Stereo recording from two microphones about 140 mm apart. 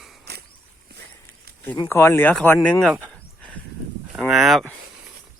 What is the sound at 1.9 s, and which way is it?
Speech, 20° left (ahead or behind).